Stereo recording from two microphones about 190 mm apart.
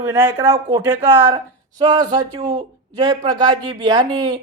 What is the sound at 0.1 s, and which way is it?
A woman's voice, 15° right (ahead or behind).